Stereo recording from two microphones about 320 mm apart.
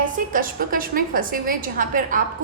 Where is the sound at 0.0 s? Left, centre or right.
Right.